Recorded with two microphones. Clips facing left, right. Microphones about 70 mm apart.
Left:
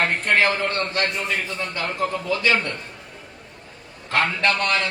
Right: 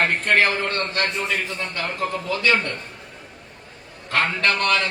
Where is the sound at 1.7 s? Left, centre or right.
Right.